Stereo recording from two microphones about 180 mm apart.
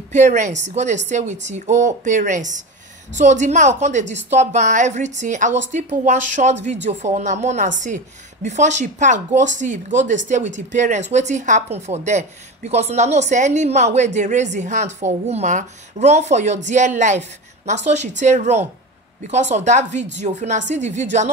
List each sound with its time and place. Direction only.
0.1 s a woman's voice: 40° right (ahead or behind)